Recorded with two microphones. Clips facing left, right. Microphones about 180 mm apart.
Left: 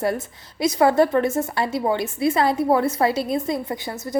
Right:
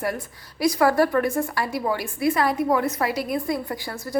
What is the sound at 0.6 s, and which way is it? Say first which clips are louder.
A woman's voice: left 2 dB; 20° left (ahead or behind).